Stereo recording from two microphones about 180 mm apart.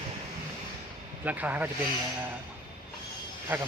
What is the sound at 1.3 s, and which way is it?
Speech, 10° right (ahead or behind).